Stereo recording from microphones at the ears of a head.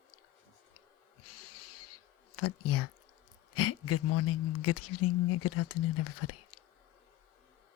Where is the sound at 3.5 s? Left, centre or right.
Left.